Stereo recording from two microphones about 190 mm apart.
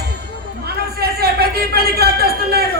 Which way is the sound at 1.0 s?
55° right (ahead or behind).